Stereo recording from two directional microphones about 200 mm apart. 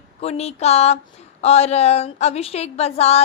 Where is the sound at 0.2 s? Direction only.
30° left (ahead or behind).